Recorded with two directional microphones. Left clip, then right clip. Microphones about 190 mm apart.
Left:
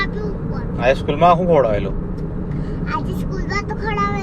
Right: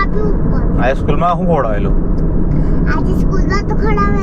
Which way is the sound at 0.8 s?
40° left (ahead or behind).